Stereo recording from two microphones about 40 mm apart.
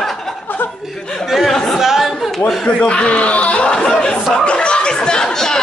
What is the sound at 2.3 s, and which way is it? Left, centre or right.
Speech, centre.